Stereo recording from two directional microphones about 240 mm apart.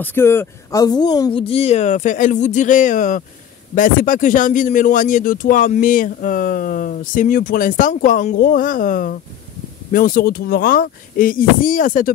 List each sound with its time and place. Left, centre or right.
0.0 s speech: centre; by 12.1 s left